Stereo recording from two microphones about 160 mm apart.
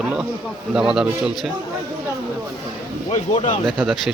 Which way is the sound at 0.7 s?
5° right (ahead or behind).